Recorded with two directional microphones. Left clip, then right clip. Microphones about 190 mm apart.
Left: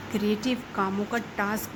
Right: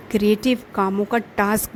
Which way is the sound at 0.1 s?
45° right (ahead or behind).